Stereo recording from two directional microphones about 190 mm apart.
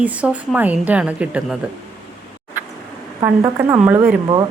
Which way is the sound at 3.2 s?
10° right (ahead or behind).